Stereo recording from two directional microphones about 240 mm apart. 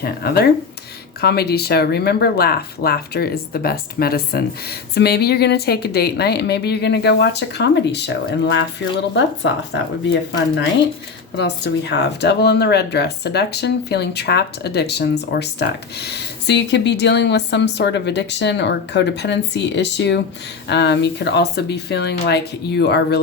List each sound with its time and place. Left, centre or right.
1.2 s speech: left
11.3 s speech: left